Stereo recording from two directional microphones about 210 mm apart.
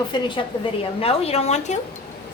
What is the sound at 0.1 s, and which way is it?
A child's voice, 25° left (ahead or behind).